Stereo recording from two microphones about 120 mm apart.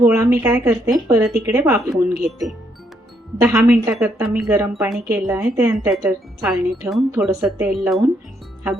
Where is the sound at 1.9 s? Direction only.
Centre (ahead or behind).